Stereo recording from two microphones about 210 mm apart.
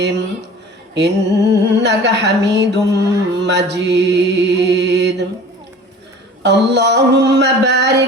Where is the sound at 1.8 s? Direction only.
55° right (ahead or behind).